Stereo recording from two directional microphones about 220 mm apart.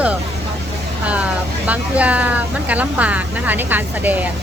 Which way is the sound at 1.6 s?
5° right (ahead or behind).